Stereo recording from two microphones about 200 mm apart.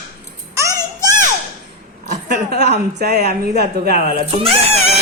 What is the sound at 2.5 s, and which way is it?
Speech, 55° right (ahead or behind).